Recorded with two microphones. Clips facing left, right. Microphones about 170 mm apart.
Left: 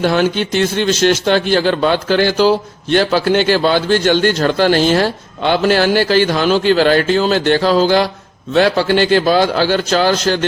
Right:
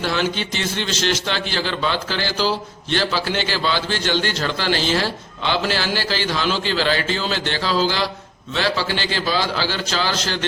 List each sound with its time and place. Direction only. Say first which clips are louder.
0.0 s a man's voice: left 8 dB; 55° left (ahead or behind)